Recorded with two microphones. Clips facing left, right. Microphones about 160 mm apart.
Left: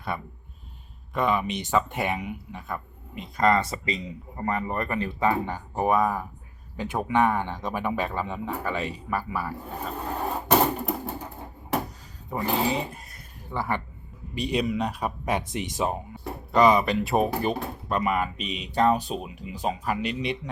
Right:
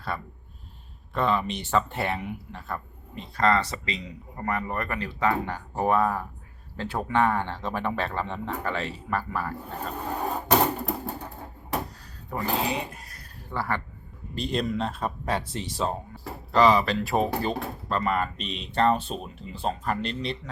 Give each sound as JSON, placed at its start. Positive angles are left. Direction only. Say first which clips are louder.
{"t": 1.1, "sound": "speech", "louder": "left 1 dB", "side_deg": 15}
{"t": 2.2, "sound": "speech", "louder": "even", "side_deg": 0}
{"t": 2.6, "sound": "speech", "louder": "even", "side_deg": 15}
{"t": 11.7, "sound": "a sound", "louder": "left 3 dB", "side_deg": 0}
{"t": 12.3, "sound": "speech", "louder": "left 2 dB", "side_deg": 0}
{"t": 13.1, "sound": "a sound", "louder": "left 1 dB", "side_deg": 15}
{"t": 14.3, "sound": "speech", "louder": "left 2 dB", "side_deg": 10}
{"t": 16.2, "sound": "speech", "louder": "left 1 dB", "side_deg": 0}
{"t": 17.2, "sound": "speech", "louder": "left 1 dB", "side_deg": 20}